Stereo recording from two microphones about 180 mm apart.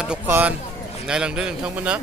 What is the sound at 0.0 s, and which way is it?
A man's voice, 5° right (ahead or behind).